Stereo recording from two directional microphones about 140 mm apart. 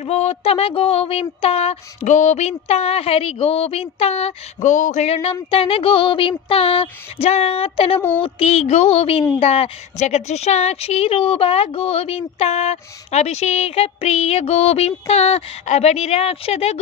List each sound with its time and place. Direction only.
0.0 s speech: 50° left (ahead or behind)